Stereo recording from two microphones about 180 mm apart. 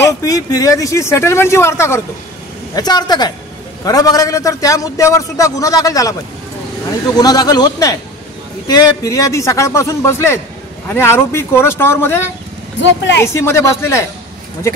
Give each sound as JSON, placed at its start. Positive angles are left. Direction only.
{"t": 0.0, "sound": "a man's voice", "side_deg": 20}
{"t": 7.2, "sound": "a man's voice", "side_deg": 20}